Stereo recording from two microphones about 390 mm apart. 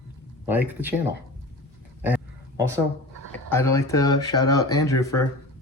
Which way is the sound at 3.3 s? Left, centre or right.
Centre.